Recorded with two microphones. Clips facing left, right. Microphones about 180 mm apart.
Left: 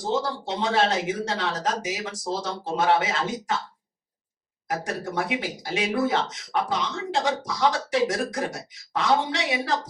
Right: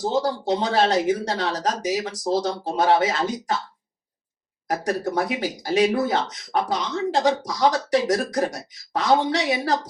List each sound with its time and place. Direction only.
0.1 s speech: 35° right (ahead or behind)
4.7 s speech: 40° right (ahead or behind)